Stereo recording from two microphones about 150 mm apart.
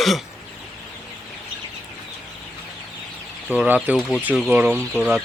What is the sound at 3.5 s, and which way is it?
Speech, 10° right (ahead or behind).